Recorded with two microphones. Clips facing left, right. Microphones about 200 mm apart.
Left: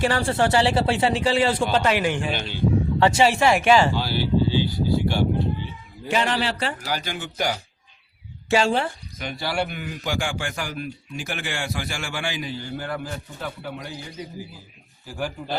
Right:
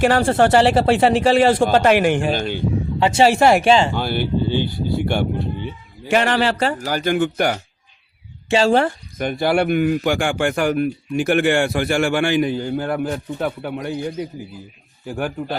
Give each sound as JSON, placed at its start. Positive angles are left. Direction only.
{"t": 0.0, "sound": "a man's voice", "side_deg": -55}
{"t": 3.7, "sound": "speech", "side_deg": -25}
{"t": 3.9, "sound": "speech", "side_deg": -55}
{"t": 8.8, "sound": "a man's voice", "side_deg": -55}